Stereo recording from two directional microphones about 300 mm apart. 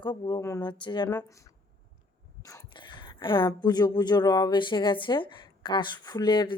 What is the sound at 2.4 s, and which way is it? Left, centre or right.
Speech, centre.